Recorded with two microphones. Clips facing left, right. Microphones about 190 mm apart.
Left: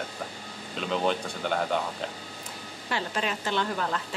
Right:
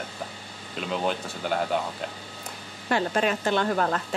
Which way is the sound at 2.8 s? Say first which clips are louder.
Right 6 dB; 50° right (ahead or behind).